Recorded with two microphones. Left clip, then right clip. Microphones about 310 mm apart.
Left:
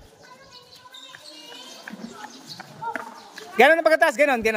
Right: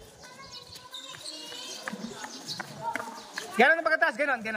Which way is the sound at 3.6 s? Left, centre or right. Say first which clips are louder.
Left 7 dB; left.